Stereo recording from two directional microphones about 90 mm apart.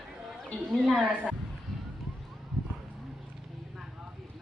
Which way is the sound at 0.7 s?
Centre (ahead or behind).